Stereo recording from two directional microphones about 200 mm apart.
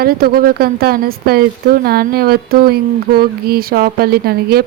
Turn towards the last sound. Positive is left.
turn(degrees=-50)  # may be behind; listen again after turning